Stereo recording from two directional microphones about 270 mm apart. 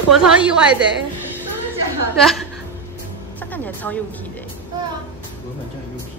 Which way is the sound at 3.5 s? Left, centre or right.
Centre.